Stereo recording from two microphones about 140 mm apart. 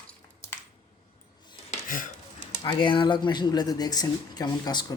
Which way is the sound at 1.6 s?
75° left (ahead or behind).